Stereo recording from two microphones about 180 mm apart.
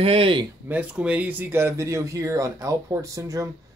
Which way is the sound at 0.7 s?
10° right (ahead or behind).